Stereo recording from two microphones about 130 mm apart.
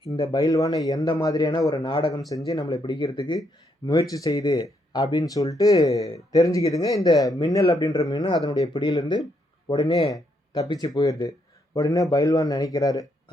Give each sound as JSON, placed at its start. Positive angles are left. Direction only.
{"t": 0.2, "sound": "speech", "side_deg": 25}
{"t": 2.3, "sound": "speech", "side_deg": 30}
{"t": 9.8, "sound": "speech", "side_deg": 45}
{"t": 10.1, "sound": "speech", "side_deg": 30}